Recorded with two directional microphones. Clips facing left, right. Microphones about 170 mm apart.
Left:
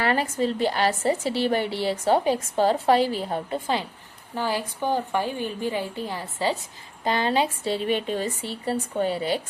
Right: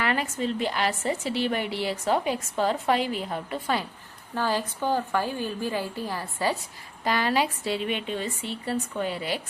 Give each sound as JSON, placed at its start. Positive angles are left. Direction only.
{"t": 0.0, "sound": "a woman's voice", "side_deg": 35}
{"t": 4.4, "sound": "a woman's voice", "side_deg": 15}